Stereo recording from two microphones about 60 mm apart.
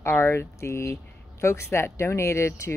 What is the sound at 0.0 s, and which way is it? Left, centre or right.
Speech, left.